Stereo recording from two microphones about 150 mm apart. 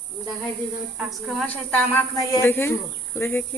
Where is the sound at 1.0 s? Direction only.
Centre (ahead or behind).